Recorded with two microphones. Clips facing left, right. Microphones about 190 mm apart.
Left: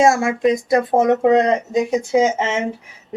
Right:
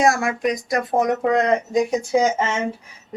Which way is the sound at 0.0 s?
25° left (ahead or behind).